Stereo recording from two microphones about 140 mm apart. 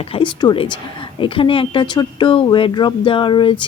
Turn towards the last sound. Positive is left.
turn(degrees=35)  # may be behind; listen again after turning